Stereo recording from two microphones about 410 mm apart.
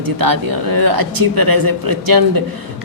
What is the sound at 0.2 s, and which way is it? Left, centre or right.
Speech, right.